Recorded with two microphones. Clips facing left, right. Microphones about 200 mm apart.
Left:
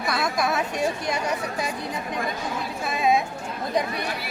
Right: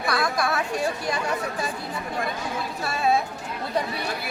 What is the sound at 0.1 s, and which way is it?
Speech, 20° left (ahead or behind).